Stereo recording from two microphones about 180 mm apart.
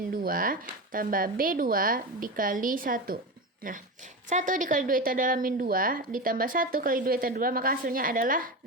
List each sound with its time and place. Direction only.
0.1 s speech: 50° right (ahead or behind)
4.3 s speech: 45° right (ahead or behind)